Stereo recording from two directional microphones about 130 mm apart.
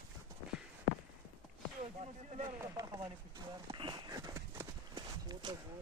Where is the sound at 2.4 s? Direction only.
30° right (ahead or behind).